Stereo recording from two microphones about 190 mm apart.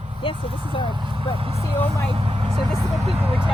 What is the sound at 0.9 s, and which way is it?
Speech, 25° right (ahead or behind).